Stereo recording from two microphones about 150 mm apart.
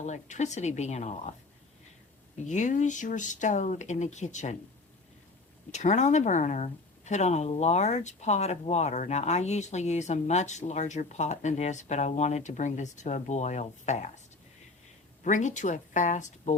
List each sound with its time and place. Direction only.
0.0 s speech: 50° left (ahead or behind)
2.5 s speech: 55° left (ahead or behind)
5.7 s speech: 50° left (ahead or behind)
15.2 s speech: 55° left (ahead or behind)